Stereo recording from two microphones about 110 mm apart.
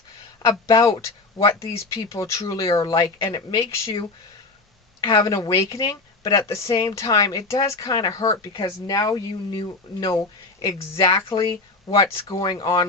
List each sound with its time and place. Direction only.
0.7 s speech: 30° left (ahead or behind)
4.9 s speech: 35° left (ahead or behind)